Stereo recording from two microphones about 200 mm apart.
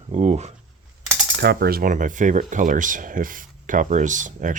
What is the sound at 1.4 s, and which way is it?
Speech, 50° right (ahead or behind).